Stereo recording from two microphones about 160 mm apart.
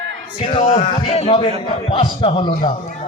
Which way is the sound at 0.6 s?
45° left (ahead or behind).